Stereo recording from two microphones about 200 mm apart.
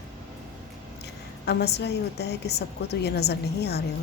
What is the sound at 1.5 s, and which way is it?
A woman's voice, 55° left (ahead or behind).